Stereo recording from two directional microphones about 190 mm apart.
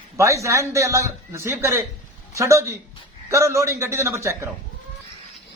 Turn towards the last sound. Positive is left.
turn(degrees=-15)  # may be behind; listen again after turning